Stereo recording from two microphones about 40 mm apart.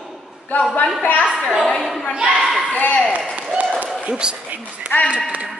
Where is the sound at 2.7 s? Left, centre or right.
Left.